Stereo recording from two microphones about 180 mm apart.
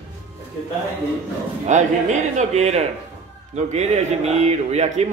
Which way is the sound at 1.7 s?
40° right (ahead or behind).